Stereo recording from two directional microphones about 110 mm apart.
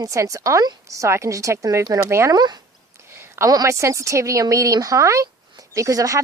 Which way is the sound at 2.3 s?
40° right (ahead or behind).